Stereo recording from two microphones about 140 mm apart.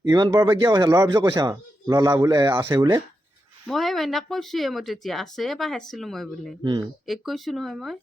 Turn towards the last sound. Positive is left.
turn(degrees=0)  # may be behind; listen again after turning